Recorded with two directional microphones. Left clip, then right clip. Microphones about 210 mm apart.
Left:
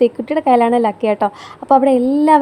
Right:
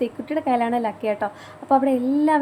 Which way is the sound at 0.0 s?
35° left (ahead or behind).